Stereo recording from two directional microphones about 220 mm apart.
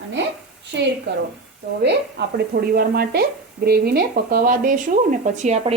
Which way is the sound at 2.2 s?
50° right (ahead or behind).